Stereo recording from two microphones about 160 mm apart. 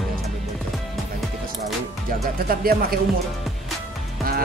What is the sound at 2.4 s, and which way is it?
Speech, 65° right (ahead or behind).